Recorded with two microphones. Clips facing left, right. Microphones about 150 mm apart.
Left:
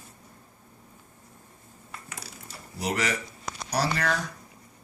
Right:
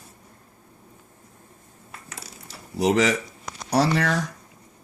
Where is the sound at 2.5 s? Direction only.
90° right.